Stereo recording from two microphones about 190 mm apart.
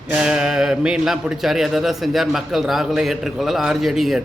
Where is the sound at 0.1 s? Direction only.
5° right (ahead or behind).